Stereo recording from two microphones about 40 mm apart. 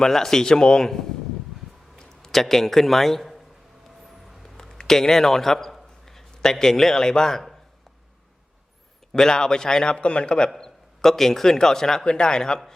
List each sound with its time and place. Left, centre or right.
0.0 s a man's voice: centre
4.5 s a man's voice: centre
9.1 s a man's voice: centre
10.6 s a man's voice: centre